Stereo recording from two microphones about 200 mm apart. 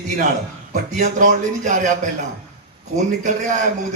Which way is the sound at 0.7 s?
40° right (ahead or behind).